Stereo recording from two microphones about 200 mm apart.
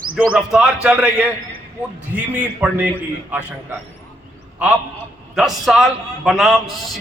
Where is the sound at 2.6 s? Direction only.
10° right (ahead or behind).